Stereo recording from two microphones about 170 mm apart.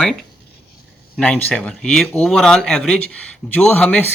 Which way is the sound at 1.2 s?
5° left (ahead or behind).